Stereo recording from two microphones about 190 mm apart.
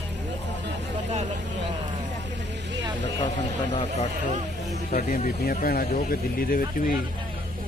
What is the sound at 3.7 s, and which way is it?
Speech, 35° left (ahead or behind).